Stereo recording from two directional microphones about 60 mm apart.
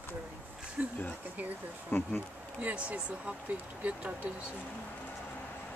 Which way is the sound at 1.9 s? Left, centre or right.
Left.